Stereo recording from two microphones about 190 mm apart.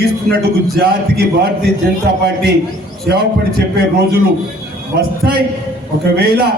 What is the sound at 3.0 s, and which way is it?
A man's voice, 55° right (ahead or behind).